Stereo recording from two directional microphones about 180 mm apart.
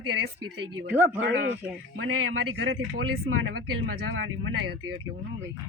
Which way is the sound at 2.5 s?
80° right.